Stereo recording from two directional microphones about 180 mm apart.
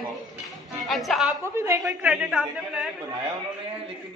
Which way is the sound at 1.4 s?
15° right (ahead or behind).